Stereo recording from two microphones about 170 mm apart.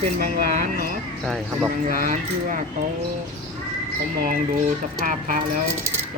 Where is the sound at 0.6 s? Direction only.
60° left (ahead or behind).